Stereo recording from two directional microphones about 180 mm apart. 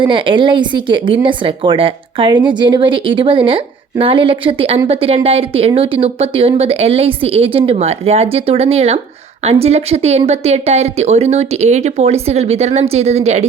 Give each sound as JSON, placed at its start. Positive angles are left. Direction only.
{"t": 0.0, "sound": "a woman's voice", "side_deg": -30}